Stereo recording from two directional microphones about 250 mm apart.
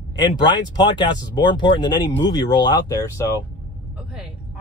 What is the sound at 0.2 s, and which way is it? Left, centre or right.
Speech, centre.